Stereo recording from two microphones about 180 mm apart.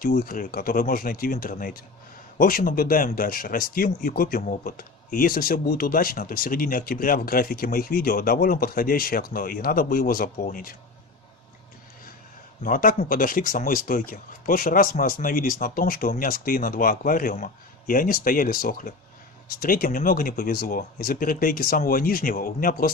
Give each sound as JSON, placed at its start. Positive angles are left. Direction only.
{"t": 0.0, "sound": "speech", "side_deg": 50}
{"t": 12.6, "sound": "speech", "side_deg": 50}